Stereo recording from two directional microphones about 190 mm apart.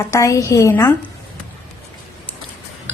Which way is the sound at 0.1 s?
15° left (ahead or behind).